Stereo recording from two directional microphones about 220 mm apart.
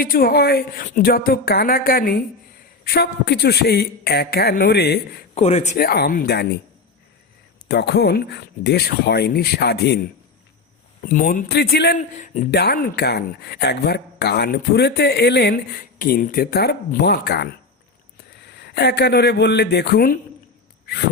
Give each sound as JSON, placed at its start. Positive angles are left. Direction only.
{"t": 0.0, "sound": "speech", "side_deg": 40}
{"t": 5.3, "sound": "speech", "side_deg": 30}
{"t": 7.7, "sound": "speech", "side_deg": 50}
{"t": 11.0, "sound": "speech", "side_deg": 40}
{"t": 12.1, "sound": "speech", "side_deg": 35}
{"t": 12.5, "sound": "a man's voice", "side_deg": 45}